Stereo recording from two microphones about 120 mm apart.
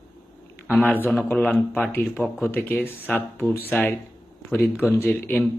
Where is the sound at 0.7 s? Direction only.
15° left (ahead or behind).